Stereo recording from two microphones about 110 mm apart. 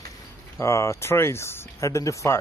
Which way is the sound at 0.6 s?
25° left (ahead or behind).